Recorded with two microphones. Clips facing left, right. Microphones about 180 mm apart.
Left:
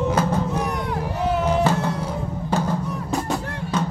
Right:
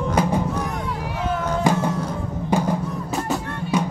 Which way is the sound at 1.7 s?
15° right (ahead or behind).